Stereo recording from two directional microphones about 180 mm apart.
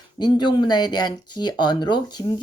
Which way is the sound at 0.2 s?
25° left (ahead or behind).